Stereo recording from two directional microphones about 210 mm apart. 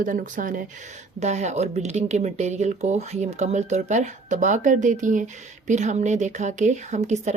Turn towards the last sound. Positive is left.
turn(degrees=-35)  # may be behind; listen again after turning